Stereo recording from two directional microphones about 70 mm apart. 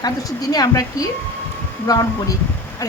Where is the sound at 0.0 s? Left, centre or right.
Left.